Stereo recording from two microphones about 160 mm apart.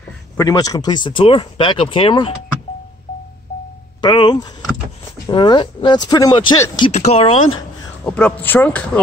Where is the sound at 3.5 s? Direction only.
70° left (ahead or behind).